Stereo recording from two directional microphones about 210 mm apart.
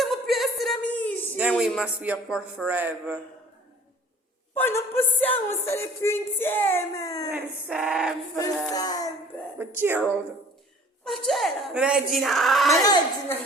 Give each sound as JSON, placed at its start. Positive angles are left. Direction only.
{"t": 0.0, "sound": "a sound", "side_deg": 0}
{"t": 1.4, "sound": "a man's voice", "side_deg": -5}
{"t": 4.5, "sound": "a sound", "side_deg": 10}
{"t": 5.5, "sound": "speech", "side_deg": 10}
{"t": 7.3, "sound": "a man's voice", "side_deg": -10}
{"t": 8.7, "sound": "speech", "side_deg": 15}
{"t": 9.6, "sound": "speech", "side_deg": -10}
{"t": 11.0, "sound": "a man's voice", "side_deg": 0}
{"t": 12.8, "sound": "speech", "side_deg": 20}